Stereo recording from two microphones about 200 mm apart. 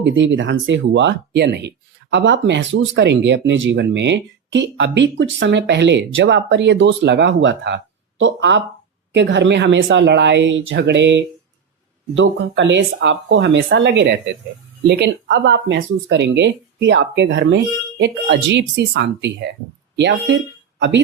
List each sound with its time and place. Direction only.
0.0 s speech: 65° right (ahead or behind)